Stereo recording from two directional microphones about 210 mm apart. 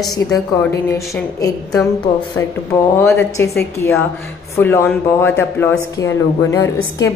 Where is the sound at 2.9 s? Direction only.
10° left (ahead or behind).